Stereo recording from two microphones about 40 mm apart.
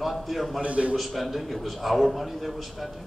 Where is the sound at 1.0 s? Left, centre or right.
Centre.